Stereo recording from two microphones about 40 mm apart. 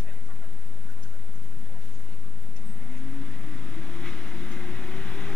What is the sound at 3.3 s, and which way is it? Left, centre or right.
Vehicle, left.